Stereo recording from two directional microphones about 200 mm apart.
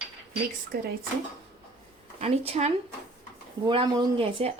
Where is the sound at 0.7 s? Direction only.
50° right (ahead or behind).